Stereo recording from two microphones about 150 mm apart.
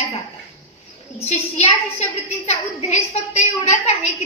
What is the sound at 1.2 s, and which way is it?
A woman's voice, 45° left (ahead or behind).